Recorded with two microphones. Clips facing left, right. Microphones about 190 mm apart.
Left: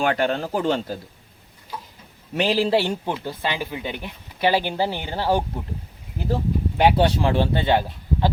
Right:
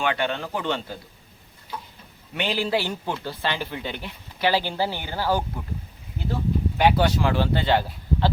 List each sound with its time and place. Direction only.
0.0 s speech: 40° left (ahead or behind)
2.3 s speech: 35° left (ahead or behind)
3.1 s speech: 15° left (ahead or behind)